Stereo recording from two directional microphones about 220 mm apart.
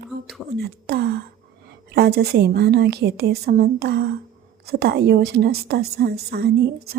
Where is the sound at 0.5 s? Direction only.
45° right (ahead or behind).